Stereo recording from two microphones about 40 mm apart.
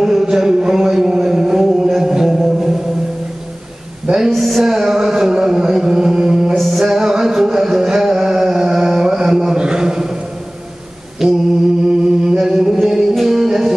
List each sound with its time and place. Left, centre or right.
0.0 s mantra: centre
1.9 s music: centre
4.3 s music: centre
6.5 s music: centre
9.6 s a sound: centre
11.2 s mantra: centre
12.3 s music: centre